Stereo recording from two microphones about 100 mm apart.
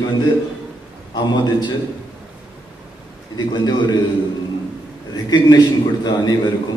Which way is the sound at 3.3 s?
45° left (ahead or behind).